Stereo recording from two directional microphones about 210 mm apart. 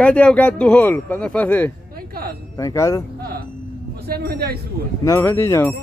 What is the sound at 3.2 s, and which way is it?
Music, 45° right (ahead or behind).